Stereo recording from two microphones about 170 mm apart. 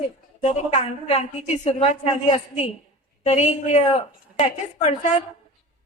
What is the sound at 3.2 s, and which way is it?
A woman's voice, 40° left (ahead or behind).